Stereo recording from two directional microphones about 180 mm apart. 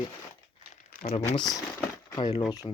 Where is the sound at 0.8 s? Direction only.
50° left (ahead or behind).